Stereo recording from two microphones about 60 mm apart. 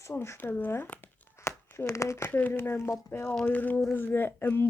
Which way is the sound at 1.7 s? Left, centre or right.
Left.